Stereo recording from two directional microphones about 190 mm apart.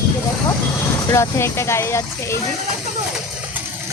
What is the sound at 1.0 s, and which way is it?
Speech, 15° left (ahead or behind).